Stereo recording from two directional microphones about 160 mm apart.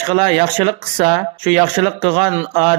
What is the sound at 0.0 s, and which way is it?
Speech, 35° right (ahead or behind).